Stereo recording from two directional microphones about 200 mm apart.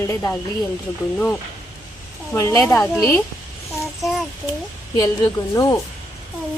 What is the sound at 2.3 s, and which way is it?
Speech, 15° left (ahead or behind).